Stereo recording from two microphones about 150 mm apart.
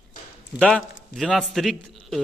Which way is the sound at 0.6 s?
5° left (ahead or behind).